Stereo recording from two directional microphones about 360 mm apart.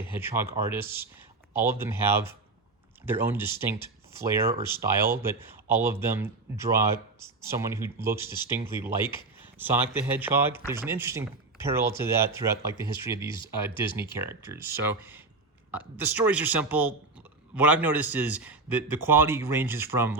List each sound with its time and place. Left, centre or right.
0.0 s a man's voice: centre